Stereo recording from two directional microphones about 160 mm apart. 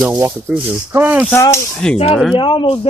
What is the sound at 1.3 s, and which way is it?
Speech, 15° left (ahead or behind).